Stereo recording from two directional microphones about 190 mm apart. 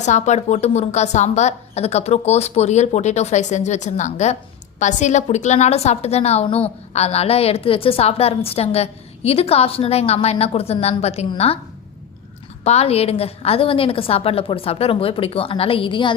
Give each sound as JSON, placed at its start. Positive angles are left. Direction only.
{"t": 0.0, "sound": "a woman's voice", "side_deg": 40}
{"t": 12.6, "sound": "a woman's voice", "side_deg": 35}